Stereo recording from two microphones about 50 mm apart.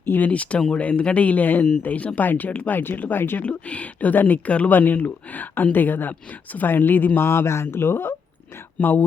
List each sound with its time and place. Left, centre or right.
0.0 s speech: left
0.3 s speech: left
3.4 s speech: left
7.3 s speech: left